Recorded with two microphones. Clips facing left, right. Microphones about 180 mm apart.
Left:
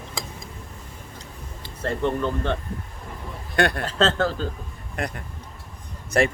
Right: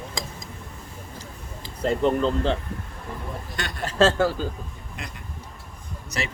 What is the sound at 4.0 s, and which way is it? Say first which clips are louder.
Speech: right 3 dB; 10° right (ahead or behind).